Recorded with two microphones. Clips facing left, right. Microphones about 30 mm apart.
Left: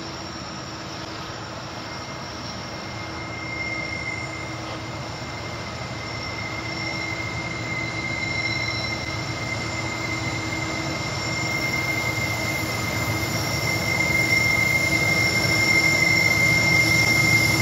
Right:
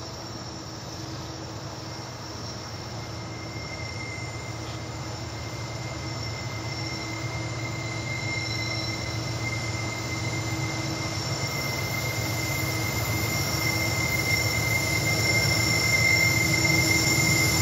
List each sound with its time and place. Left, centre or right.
9.6 s vehicle: left
13.0 s train: left